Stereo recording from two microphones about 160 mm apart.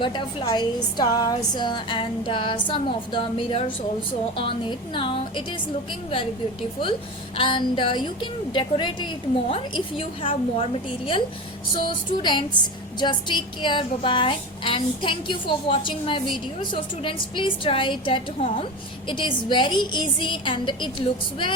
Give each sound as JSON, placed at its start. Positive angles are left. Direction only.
{"t": 0.0, "sound": "a woman's voice", "side_deg": 30}
{"t": 7.3, "sound": "a woman's voice", "side_deg": 30}
{"t": 11.8, "sound": "music", "side_deg": 30}
{"t": 13.0, "sound": "a woman's voice", "side_deg": 30}